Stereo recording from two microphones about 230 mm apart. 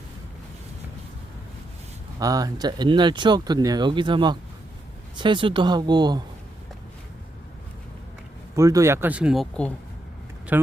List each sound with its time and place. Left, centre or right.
2.1 s speech: centre
8.5 s speech: centre
10.5 s speech: centre